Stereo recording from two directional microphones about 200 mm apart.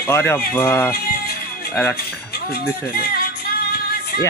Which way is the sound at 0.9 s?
50° left (ahead or behind).